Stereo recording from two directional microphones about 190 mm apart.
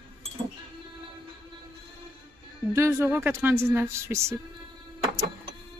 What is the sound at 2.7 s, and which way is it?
A woman's voice, 15° right (ahead or behind).